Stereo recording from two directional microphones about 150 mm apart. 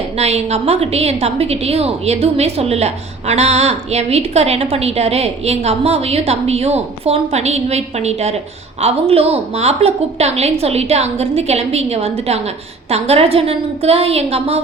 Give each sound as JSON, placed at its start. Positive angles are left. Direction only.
{"t": 0.2, "sound": "a woman's voice", "side_deg": -45}